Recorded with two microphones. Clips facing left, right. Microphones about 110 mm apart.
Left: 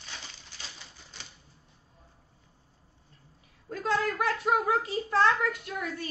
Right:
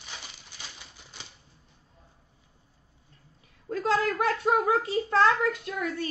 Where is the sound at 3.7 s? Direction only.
35° right (ahead or behind).